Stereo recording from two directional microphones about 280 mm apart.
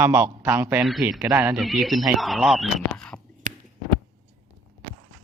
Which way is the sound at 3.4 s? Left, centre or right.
Right.